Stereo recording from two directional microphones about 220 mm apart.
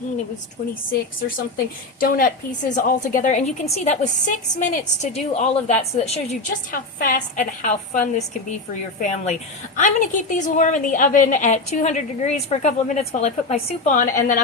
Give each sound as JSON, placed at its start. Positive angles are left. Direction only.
{"t": 1.5, "sound": "a woman's voice", "side_deg": 40}